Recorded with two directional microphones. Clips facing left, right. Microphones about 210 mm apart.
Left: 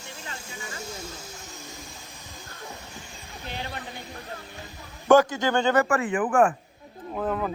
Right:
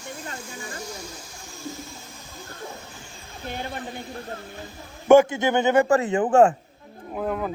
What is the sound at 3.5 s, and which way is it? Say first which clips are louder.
Speech: right 4 dB; 50° right (ahead or behind).